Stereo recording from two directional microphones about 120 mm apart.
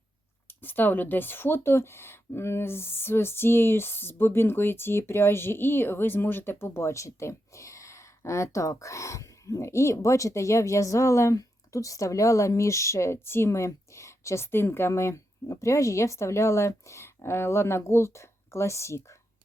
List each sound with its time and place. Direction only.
0.4 s speech: 15° left (ahead or behind)